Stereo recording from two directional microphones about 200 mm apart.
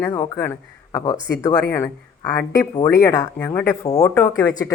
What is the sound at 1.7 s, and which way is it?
Speech, 5° left (ahead or behind).